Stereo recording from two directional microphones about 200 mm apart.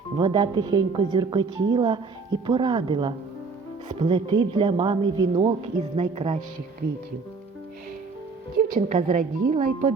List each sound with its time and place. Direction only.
0.2 s a woman's voice: 25° right (ahead or behind)
8.5 s a woman's voice: 45° right (ahead or behind)